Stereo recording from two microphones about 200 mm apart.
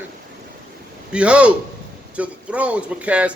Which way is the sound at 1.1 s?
5° right (ahead or behind).